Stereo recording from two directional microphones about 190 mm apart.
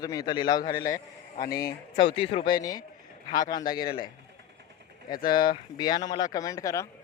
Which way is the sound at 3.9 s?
50° left (ahead or behind).